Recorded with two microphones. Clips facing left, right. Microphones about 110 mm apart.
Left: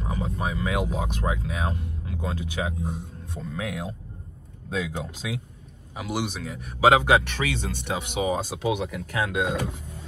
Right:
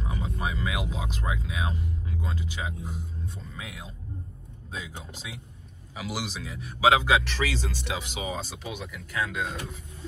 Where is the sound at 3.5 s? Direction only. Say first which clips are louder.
Left 10 dB; 60° left (ahead or behind).